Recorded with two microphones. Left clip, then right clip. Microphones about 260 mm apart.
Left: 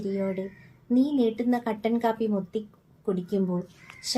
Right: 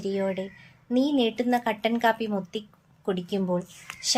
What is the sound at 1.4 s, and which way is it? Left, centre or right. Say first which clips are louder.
Speech: right 3 dB; right.